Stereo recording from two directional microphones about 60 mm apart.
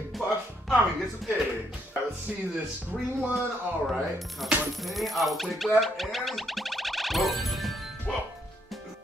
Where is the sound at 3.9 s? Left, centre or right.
Centre.